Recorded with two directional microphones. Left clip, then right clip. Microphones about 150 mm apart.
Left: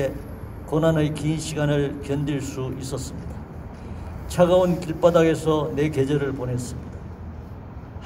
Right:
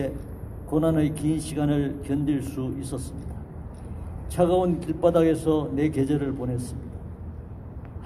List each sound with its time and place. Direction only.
0.7 s a man's voice: 10° right (ahead or behind)
4.4 s a man's voice: 5° right (ahead or behind)